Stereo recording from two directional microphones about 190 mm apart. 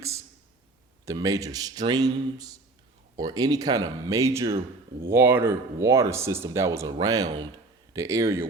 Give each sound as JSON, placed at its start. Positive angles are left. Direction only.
{"t": 1.0, "sound": "speech", "side_deg": -15}